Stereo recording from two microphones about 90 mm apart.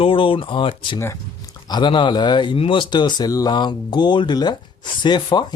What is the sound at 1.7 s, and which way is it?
Speech, 60° left (ahead or behind).